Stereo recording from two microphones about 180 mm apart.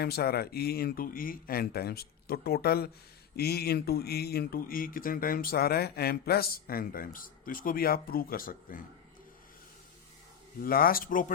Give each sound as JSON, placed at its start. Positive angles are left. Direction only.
{"t": 0.0, "sound": "speech", "side_deg": 60}
{"t": 10.6, "sound": "speech", "side_deg": 55}